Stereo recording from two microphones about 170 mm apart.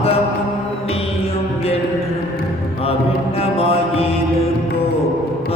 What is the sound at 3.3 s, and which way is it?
Mantra, 35° left (ahead or behind).